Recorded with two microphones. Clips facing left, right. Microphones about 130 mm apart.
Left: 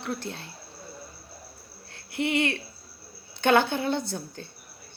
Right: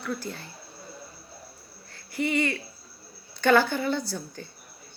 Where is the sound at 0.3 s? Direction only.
80° left.